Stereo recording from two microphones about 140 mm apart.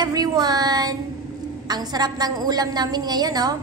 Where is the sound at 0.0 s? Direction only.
30° right (ahead or behind).